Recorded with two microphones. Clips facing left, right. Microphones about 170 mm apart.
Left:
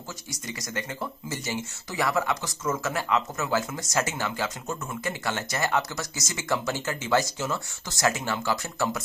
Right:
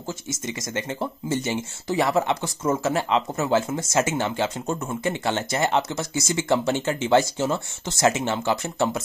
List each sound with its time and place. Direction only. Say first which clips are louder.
0.3 s speech: right 4 dB; 25° right (ahead or behind)